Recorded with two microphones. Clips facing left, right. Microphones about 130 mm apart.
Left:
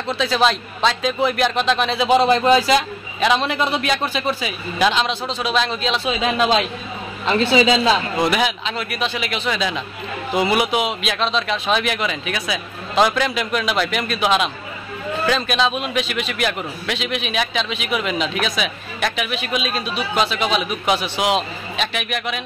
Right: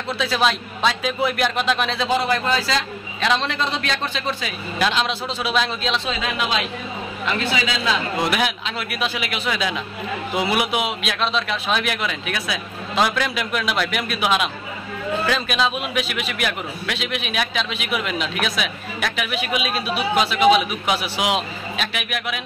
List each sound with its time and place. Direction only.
0.1 s a man's voice: 5° right (ahead or behind)
2.0 s a man's voice: 20° left (ahead or behind)
3.2 s a man's voice: 5° left (ahead or behind)
7.2 s a man's voice: 30° left (ahead or behind)
8.2 s a man's voice: centre (ahead or behind)